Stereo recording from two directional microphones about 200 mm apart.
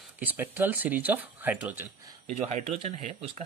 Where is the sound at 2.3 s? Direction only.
35° right (ahead or behind).